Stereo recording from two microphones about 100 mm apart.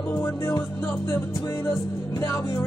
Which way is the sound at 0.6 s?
35° left (ahead or behind).